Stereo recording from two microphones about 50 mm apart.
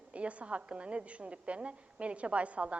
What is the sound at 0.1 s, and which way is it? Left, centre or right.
A woman's voice, right.